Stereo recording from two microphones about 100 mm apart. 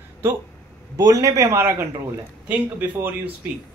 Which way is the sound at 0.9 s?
35° right (ahead or behind).